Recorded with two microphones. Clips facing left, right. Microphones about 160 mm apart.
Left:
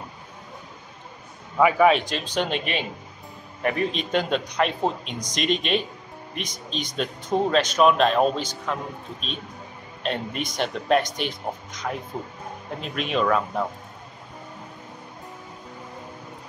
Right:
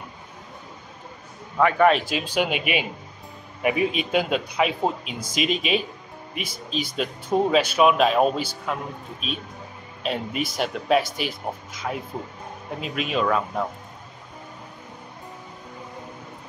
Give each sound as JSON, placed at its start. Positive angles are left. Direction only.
{"t": 1.6, "sound": "speech", "side_deg": 5}
{"t": 10.0, "sound": "speech", "side_deg": -5}